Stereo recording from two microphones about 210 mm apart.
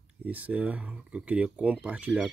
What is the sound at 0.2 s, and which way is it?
Speech, 5° right (ahead or behind).